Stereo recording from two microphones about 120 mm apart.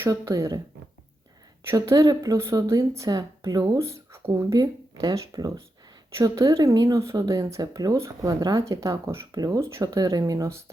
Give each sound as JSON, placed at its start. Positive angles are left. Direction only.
{"t": 0.1, "sound": "speech", "side_deg": -25}
{"t": 1.6, "sound": "speech", "side_deg": -25}